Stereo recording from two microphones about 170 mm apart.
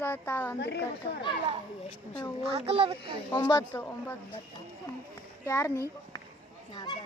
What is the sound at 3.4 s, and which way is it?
Speech, 15° left (ahead or behind).